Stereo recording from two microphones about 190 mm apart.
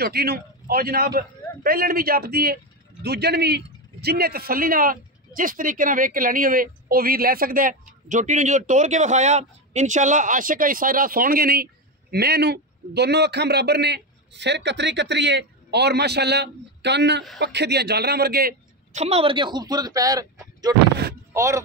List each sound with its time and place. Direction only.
0.0 s a man's voice: 55° right (ahead or behind)
18.9 s speech: 35° right (ahead or behind); by 21.6 s 15° right (ahead or behind)